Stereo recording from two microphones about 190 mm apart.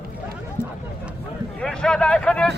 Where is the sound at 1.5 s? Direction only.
5° left (ahead or behind).